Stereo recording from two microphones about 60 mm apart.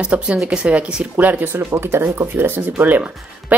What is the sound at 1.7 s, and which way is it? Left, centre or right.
Speech, right.